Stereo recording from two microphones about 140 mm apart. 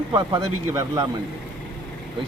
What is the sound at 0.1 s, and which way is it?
Speech, 25° right (ahead or behind).